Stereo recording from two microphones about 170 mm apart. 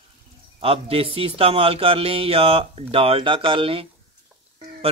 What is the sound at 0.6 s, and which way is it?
A man's voice, 35° right (ahead or behind).